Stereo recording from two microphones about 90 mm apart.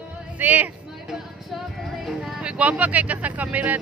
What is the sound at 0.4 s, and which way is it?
Speech, 20° right (ahead or behind).